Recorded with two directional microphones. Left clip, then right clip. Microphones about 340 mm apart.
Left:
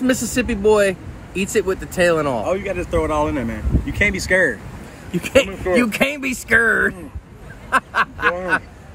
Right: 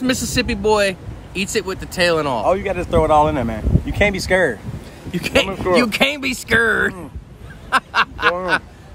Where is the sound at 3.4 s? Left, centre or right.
Right.